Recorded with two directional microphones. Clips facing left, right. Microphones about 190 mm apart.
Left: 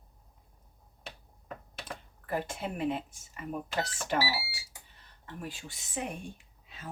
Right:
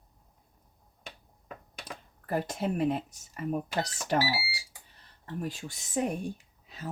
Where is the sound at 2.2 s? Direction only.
40° right (ahead or behind).